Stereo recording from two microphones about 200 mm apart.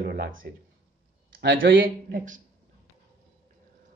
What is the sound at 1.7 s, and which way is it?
Speech, 45° right (ahead or behind).